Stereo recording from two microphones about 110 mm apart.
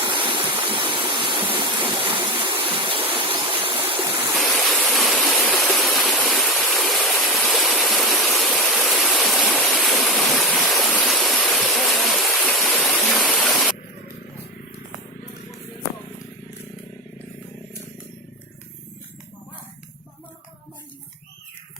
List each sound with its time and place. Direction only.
0.1 s waterfall: 50° right (ahead or behind)
2.6 s stream: 55° right (ahead or behind)
4.4 s stream: centre (ahead or behind)
5.1 s waterfall: 10° left (ahead or behind)
5.5 s stream: centre (ahead or behind)
9.6 s waterfall: centre (ahead or behind)
11.7 s stream: centre (ahead or behind)